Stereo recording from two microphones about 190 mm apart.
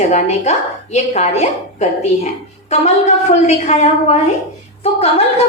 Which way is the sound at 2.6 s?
35° left (ahead or behind).